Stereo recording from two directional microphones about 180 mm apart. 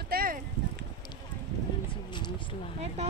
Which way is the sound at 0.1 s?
55° right (ahead or behind).